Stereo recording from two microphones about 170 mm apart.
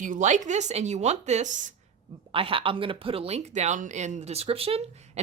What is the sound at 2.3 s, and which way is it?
Speech, 30° right (ahead or behind).